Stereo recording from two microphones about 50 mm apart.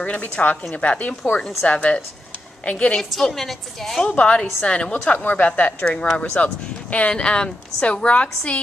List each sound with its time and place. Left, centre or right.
0.0 s a woman's voice: left
3.0 s a woman's voice: centre
4.1 s a woman's voice: left
7.2 s a woman's voice: centre